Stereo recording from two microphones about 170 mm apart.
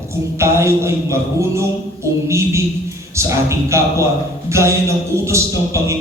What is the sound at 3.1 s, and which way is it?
A man's voice, 15° right (ahead or behind).